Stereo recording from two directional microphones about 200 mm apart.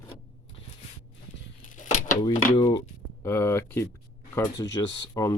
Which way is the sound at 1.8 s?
40° left (ahead or behind).